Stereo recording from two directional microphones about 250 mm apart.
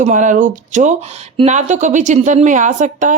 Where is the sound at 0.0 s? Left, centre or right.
Right.